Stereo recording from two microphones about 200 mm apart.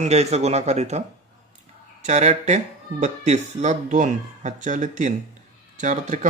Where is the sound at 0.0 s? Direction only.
35° right (ahead or behind).